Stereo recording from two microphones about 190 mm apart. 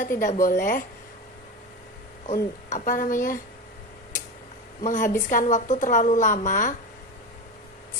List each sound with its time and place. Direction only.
0.2 s speech: 45° left (ahead or behind)
2.2 s speech: 40° left (ahead or behind)
4.8 s a woman's voice: 40° left (ahead or behind)